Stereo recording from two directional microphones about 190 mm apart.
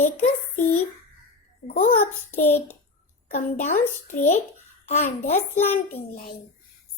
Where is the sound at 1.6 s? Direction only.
50° left (ahead or behind).